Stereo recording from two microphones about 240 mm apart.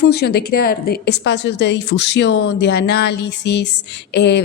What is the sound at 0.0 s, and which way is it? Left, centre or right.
A woman's voice, left.